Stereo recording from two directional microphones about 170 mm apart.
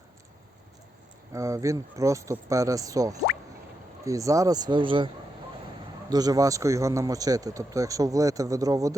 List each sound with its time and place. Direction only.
1.3 s a man's voice: 20° right (ahead or behind)